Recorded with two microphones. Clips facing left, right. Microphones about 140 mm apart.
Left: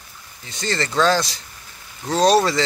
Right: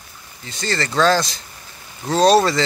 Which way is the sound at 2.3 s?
15° left (ahead or behind).